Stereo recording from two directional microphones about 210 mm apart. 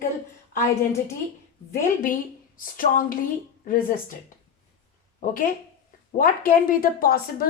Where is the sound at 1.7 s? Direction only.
40° left (ahead or behind).